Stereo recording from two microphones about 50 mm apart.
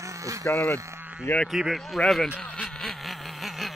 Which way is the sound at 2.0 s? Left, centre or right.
Centre.